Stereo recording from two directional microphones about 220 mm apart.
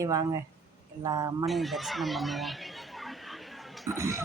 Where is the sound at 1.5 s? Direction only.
Centre (ahead or behind).